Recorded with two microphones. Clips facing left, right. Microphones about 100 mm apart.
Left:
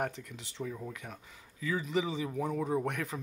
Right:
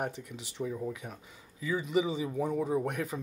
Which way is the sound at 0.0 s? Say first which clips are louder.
Even; 15° right (ahead or behind).